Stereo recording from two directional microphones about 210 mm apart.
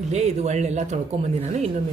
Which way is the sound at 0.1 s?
30° right (ahead or behind).